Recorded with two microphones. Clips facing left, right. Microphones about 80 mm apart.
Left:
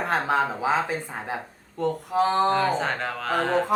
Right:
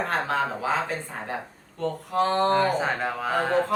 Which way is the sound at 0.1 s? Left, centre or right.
Centre.